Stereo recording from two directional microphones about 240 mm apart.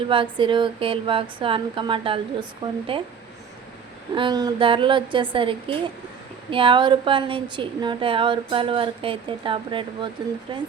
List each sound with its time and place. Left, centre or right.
0.1 s a woman's voice: right
4.1 s a woman's voice: centre